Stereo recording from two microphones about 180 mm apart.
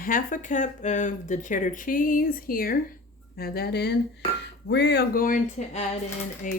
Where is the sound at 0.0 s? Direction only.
50° left (ahead or behind).